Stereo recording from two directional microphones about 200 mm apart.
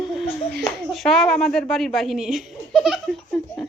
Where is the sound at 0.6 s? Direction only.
Centre (ahead or behind).